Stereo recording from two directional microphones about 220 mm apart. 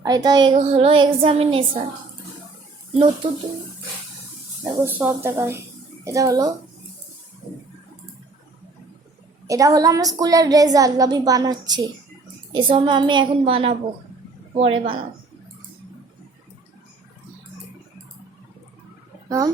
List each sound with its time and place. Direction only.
0.0 s a woman's voice: 15° right (ahead or behind)
0.5 s music: 25° right (ahead or behind)
4.6 s a woman's voice: 10° right (ahead or behind)
9.5 s a woman's voice: 15° right (ahead or behind)
12.5 s music: 20° right (ahead or behind)